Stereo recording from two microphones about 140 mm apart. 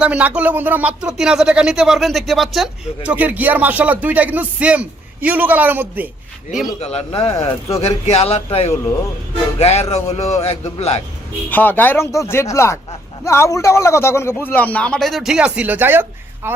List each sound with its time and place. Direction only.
0.0 s speech: 10° right (ahead or behind)
6.5 s speech: centre (ahead or behind)
6.8 s speech: 45° left (ahead or behind)
11.4 s speech: 15° left (ahead or behind); by 16.6 s 15° right (ahead or behind)